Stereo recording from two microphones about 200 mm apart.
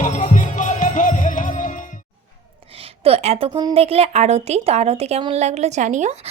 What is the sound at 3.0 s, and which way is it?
A woman's voice, 30° right (ahead or behind).